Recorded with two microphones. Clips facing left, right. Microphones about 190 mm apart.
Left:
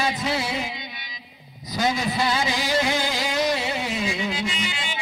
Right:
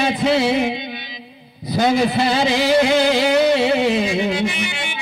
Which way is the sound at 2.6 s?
70° right (ahead or behind).